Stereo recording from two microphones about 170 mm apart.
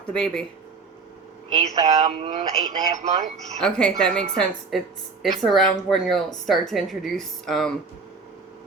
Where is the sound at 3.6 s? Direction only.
5° left (ahead or behind).